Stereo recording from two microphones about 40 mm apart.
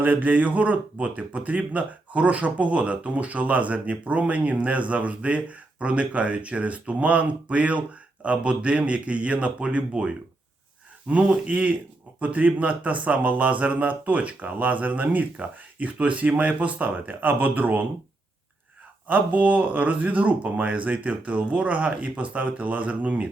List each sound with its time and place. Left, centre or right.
0.0 s speech: right
11.1 s speech: right
19.0 s speech: right